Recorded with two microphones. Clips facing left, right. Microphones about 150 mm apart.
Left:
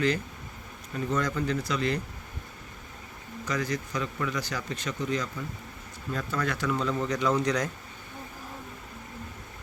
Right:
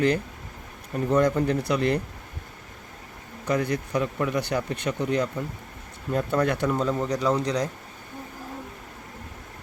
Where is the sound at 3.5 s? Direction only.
60° right (ahead or behind).